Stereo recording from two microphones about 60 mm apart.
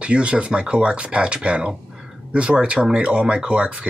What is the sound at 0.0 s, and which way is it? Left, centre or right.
Speech, centre.